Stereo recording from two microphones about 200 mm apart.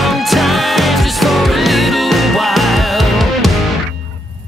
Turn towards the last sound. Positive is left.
turn(degrees=0)  # may be behind; listen again after turning